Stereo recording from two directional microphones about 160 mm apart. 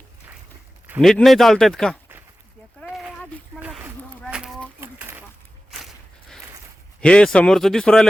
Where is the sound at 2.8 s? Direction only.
5° right (ahead or behind).